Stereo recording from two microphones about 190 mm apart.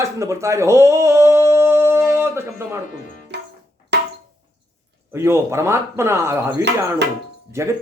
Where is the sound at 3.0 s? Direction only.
45° left (ahead or behind).